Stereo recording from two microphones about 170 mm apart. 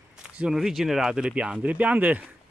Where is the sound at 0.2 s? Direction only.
5° right (ahead or behind).